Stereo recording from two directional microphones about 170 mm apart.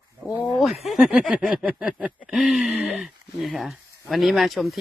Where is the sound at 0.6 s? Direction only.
Centre (ahead or behind).